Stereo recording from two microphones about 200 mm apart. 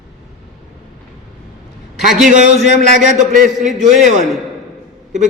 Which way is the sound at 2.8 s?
40° right (ahead or behind).